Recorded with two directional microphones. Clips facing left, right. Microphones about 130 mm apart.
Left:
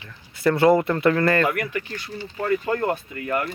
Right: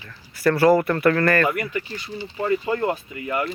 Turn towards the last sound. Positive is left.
turn(degrees=-5)  # may be behind; listen again after turning